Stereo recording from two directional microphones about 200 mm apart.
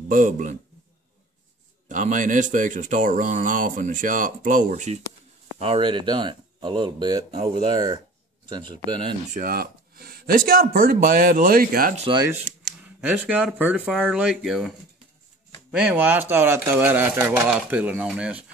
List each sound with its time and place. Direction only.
0.1 s speech: 40° right (ahead or behind)
1.9 s speech: 40° right (ahead or behind)
5.6 s speech: 25° right (ahead or behind)
9.3 s speech: 45° right (ahead or behind)
12.0 s speech: 25° right (ahead or behind)
12.8 s speech: 5° right (ahead or behind)